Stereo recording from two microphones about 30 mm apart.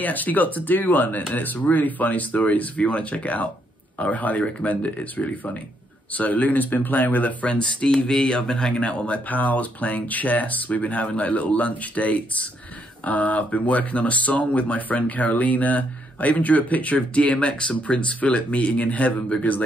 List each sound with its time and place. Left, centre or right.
0.0 s speech: left
2.8 s speech: left
7.4 s speech: left
8.8 s speech: left
9.3 s speech: left
19.5 s speech: left